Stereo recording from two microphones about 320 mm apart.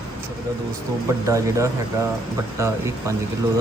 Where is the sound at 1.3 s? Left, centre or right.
Centre.